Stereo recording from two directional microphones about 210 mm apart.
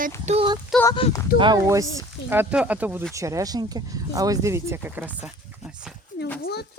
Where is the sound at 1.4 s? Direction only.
20° right (ahead or behind).